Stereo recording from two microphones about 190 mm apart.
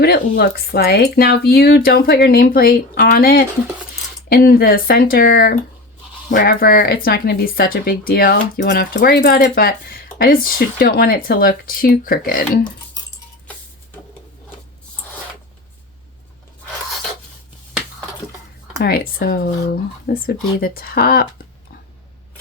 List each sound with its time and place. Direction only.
0.0 s speech: 55° left (ahead or behind)
18.8 s speech: 55° left (ahead or behind)